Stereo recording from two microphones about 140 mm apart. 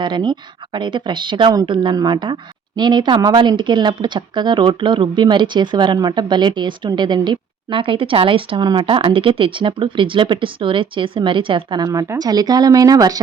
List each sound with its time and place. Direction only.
0.0 s speech: 35° right (ahead or behind)